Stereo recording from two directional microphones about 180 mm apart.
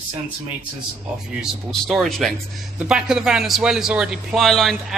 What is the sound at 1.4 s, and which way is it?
A man's voice, centre (ahead or behind).